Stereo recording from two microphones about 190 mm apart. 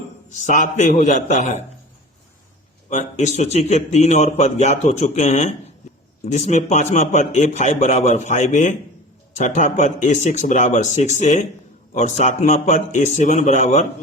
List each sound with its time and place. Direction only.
0.4 s a man's voice: 40° left (ahead or behind)
2.9 s a man's voice: 40° left (ahead or behind)